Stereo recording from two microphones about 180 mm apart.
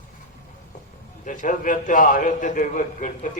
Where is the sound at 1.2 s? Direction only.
45° left (ahead or behind).